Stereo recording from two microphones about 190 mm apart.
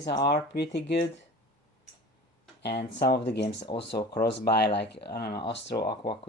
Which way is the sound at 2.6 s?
65° left (ahead or behind).